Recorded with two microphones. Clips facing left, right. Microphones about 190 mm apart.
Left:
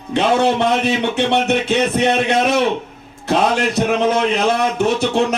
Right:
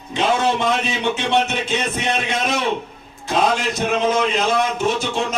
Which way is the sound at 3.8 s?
55° left (ahead or behind).